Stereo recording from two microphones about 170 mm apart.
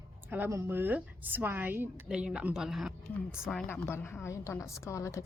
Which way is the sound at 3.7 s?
15° left (ahead or behind).